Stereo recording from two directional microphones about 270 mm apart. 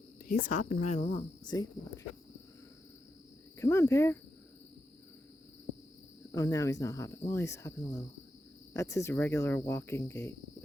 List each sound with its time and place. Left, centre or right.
0.3 s speech: left
3.6 s cricket: centre
6.3 s cricket: centre